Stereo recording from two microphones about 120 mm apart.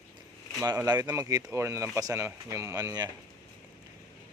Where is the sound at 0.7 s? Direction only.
35° right (ahead or behind).